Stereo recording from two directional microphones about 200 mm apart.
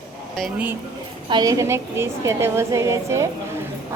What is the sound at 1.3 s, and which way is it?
A woman's voice, 20° right (ahead or behind).